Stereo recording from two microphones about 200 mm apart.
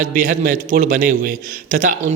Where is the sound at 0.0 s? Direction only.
40° right (ahead or behind).